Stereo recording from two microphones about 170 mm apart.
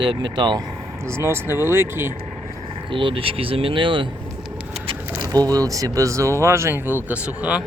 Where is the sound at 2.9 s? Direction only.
30° right (ahead or behind); by 7.6 s 5° right (ahead or behind).